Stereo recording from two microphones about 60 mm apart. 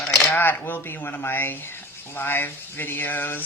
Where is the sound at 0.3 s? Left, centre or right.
Left.